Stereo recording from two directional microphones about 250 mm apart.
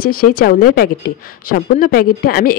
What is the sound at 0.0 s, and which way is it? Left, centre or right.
A woman's voice, left.